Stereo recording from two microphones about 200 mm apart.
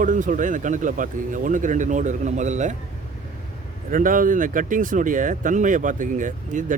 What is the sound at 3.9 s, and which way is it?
Speech, 40° right (ahead or behind).